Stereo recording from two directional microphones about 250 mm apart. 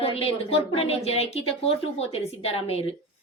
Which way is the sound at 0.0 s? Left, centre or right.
Left.